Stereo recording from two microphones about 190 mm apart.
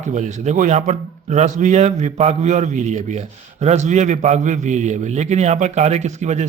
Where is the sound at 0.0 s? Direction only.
40° right (ahead or behind).